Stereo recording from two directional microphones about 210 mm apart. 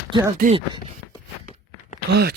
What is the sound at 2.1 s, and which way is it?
Speech, 50° right (ahead or behind).